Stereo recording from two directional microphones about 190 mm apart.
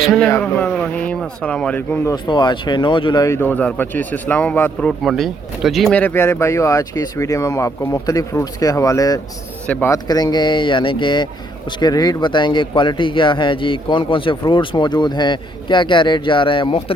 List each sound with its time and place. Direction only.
0.0 s speech: centre (ahead or behind)
0.3 s speech: 10° left (ahead or behind)
2.1 s speech: 25° left (ahead or behind)